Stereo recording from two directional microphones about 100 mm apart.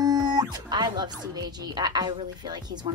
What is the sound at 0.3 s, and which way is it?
Speech, 45° right (ahead or behind).